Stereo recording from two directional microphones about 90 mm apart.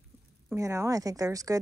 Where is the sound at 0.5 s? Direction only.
30° right (ahead or behind).